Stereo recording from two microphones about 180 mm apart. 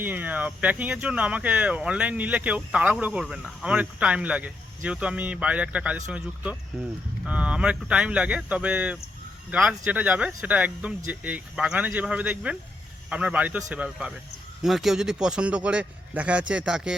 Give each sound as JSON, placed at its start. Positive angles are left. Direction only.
{"t": 0.0, "sound": "a man's voice", "side_deg": -10}